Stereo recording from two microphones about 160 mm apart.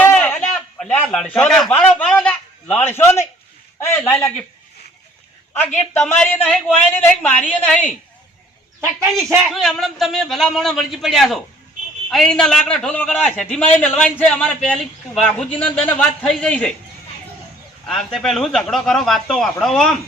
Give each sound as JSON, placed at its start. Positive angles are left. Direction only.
{"t": 0.1, "sound": "a sound", "side_deg": 5}
{"t": 0.8, "sound": "a man's voice", "side_deg": 5}
{"t": 5.5, "sound": "a man's voice", "side_deg": 5}
{"t": 8.8, "sound": "speech", "side_deg": -15}
{"t": 9.5, "sound": "a man's voice", "side_deg": 0}
{"t": 17.8, "sound": "speech", "side_deg": 0}